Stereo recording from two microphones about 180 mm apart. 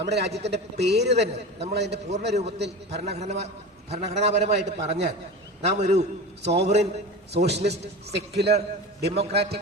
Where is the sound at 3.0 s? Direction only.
35° right (ahead or behind).